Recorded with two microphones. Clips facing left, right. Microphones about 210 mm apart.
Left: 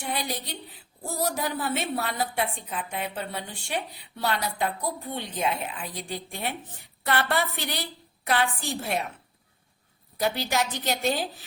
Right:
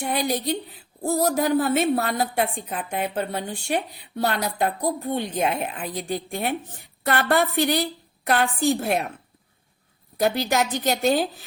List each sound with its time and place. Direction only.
0.0 s a woman's voice: 50° right (ahead or behind)
10.2 s a woman's voice: 50° right (ahead or behind)